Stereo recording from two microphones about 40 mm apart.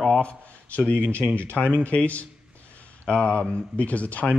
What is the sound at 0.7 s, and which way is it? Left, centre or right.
Speech, left.